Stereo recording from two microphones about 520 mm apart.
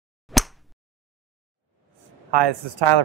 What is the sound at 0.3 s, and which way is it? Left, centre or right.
Plop, centre.